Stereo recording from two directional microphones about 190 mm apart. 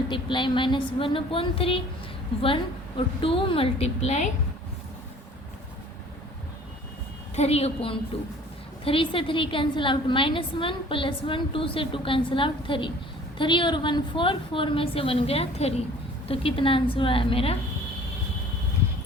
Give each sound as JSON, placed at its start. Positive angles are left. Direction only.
{"t": 0.1, "sound": "a woman's voice", "side_deg": 25}
{"t": 7.3, "sound": "a woman's voice", "side_deg": 35}